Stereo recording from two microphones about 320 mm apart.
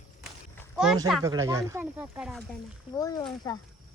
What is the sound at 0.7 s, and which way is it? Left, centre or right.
Speech, centre.